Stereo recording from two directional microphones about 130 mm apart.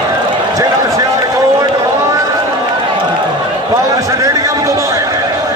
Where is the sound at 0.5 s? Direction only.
25° right (ahead or behind).